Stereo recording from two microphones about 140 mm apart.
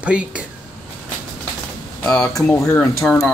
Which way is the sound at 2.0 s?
5° left (ahead or behind).